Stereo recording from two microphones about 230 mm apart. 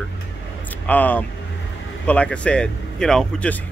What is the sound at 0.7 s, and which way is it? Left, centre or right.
Speech, centre.